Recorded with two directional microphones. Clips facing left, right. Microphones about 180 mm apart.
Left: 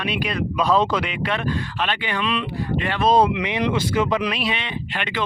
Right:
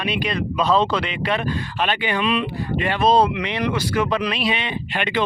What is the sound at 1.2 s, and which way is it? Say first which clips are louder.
Speech: right 1 dB; 10° right (ahead or behind).